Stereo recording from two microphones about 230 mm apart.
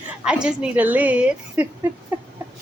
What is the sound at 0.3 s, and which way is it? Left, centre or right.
A woman's voice, centre.